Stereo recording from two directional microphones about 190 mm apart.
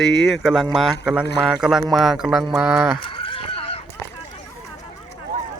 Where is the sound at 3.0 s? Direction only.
25° left (ahead or behind).